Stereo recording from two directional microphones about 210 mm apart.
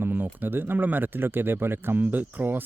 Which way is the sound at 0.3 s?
10° right (ahead or behind).